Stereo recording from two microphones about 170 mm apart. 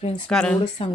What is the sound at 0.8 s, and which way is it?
Speech, 30° left (ahead or behind).